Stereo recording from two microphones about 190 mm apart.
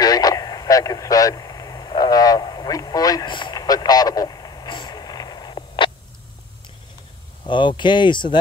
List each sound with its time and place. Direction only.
0.0 s vehicle: 20° left (ahead or behind)
7.4 s speech: 25° left (ahead or behind)